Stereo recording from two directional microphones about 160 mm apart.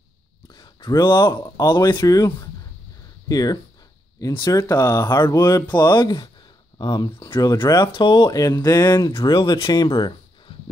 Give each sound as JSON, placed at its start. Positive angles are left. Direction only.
{"t": 0.6, "sound": "speech", "side_deg": 25}